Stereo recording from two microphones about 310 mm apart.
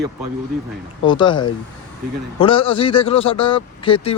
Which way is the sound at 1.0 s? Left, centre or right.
Centre.